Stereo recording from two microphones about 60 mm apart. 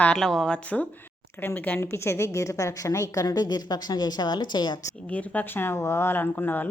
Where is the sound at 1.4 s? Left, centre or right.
Left.